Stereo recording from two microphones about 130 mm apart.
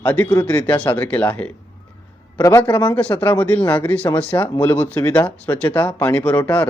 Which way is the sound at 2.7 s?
10° left (ahead or behind).